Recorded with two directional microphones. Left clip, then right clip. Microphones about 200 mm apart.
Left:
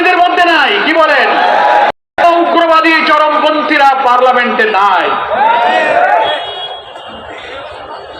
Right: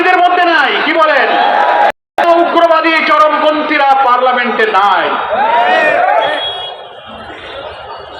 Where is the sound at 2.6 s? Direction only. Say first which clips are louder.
Left 1 dB; 35° left (ahead or behind).